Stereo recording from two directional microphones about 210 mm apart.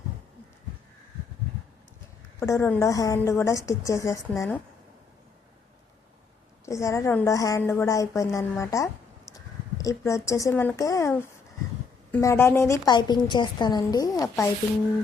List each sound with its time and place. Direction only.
2.4 s a woman's voice: 10° left (ahead or behind)
6.7 s a woman's voice: 15° left (ahead or behind)